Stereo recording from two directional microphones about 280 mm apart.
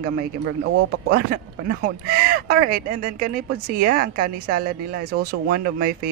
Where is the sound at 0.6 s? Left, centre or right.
Right.